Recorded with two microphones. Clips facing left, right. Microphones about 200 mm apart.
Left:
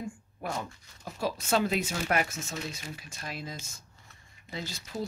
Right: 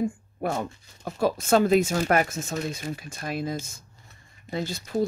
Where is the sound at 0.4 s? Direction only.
55° right (ahead or behind).